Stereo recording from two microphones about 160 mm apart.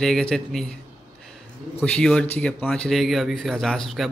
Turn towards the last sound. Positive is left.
turn(degrees=0)  # may be behind; listen again after turning